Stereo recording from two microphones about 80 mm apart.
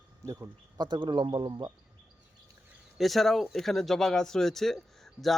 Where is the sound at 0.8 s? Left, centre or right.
Right.